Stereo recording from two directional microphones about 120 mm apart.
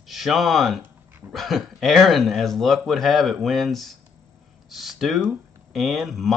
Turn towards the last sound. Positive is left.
turn(degrees=0)  # may be behind; listen again after turning